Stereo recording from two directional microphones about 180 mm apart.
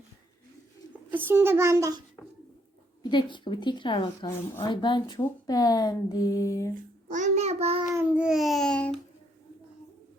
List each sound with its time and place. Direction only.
1.1 s a child's voice: 10° right (ahead or behind)
3.0 s a woman's voice: 25° left (ahead or behind)
7.1 s child singing: 40° right (ahead or behind)
7.9 s babbling: 5° right (ahead or behind)